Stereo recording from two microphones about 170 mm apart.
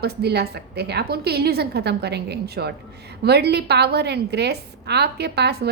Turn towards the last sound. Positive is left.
turn(degrees=-75)  # may be behind; listen again after turning